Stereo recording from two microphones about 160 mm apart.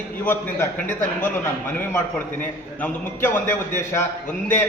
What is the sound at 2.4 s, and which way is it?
A man's voice, 10° left (ahead or behind).